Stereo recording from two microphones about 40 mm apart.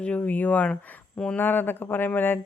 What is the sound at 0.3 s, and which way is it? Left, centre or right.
Speech, left.